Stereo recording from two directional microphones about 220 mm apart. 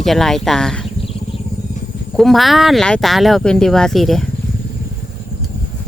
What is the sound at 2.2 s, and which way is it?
Speech, centre (ahead or behind).